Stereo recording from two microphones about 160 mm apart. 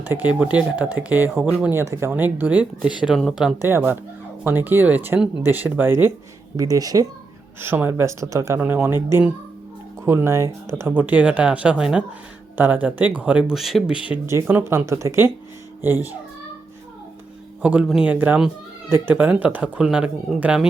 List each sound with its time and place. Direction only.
0.0 s speech: 10° right (ahead or behind)
3.6 s speech: 15° right (ahead or behind)
17.6 s speech: 5° right (ahead or behind)